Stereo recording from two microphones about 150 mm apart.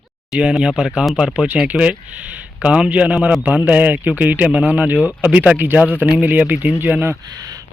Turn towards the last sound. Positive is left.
turn(degrees=-25)  # may be behind; listen again after turning